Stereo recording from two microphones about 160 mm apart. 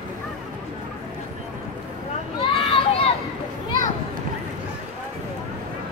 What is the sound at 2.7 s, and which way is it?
Children playing, 35° left (ahead or behind).